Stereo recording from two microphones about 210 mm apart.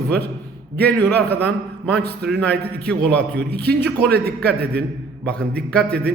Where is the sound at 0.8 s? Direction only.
5° left (ahead or behind).